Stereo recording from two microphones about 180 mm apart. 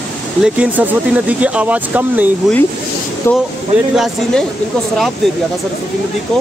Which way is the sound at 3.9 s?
Centre (ahead or behind).